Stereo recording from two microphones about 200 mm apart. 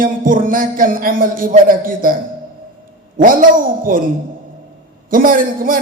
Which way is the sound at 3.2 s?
45° right (ahead or behind).